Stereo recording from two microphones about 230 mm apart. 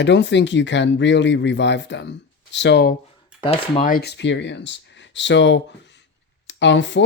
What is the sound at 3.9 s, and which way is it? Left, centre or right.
Speech, left.